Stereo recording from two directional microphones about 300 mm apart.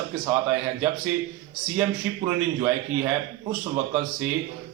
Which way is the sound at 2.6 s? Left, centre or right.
Centre.